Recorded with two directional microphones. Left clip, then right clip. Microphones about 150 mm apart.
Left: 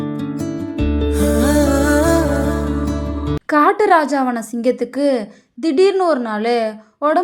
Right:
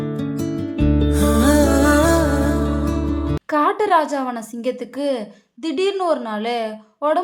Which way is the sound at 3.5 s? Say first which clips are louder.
Left 4 dB; 25° left (ahead or behind).